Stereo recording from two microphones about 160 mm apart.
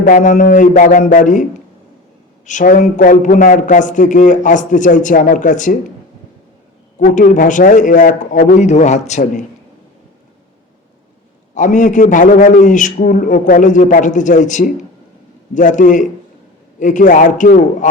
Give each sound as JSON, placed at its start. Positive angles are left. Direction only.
{"t": 0.0, "sound": "a man's voice", "side_deg": 55}
{"t": 2.5, "sound": "a man's voice", "side_deg": 50}
{"t": 7.0, "sound": "a man's voice", "side_deg": 55}
{"t": 11.5, "sound": "a man's voice", "side_deg": 55}